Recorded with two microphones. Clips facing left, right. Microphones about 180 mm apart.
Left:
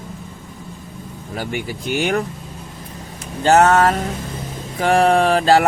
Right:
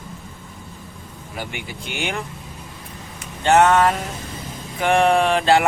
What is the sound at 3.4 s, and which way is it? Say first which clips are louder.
Speech: left 2 dB; 40° left (ahead or behind).